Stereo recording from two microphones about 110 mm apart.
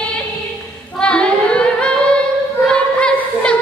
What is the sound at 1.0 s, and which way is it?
Singing, 10° left (ahead or behind).